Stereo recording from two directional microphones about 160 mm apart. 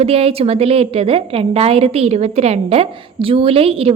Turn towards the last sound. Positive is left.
turn(degrees=-35)  # may be behind; listen again after turning